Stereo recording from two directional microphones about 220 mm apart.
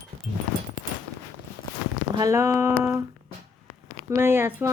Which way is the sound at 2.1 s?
15° right (ahead or behind).